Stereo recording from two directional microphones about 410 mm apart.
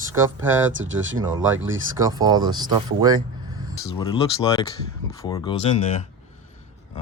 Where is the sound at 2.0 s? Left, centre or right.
Centre.